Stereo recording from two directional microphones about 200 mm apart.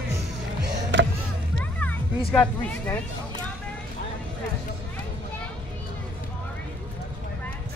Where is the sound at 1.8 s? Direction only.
5° left (ahead or behind).